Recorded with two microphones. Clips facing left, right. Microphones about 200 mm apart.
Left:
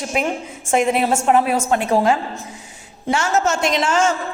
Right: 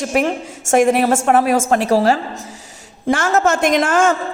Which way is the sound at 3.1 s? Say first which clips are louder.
Right 3 dB; 55° right (ahead or behind).